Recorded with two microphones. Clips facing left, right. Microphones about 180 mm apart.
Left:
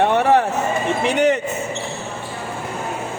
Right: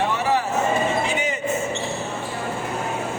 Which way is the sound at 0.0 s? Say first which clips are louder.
Left 7 dB; 60° left (ahead or behind).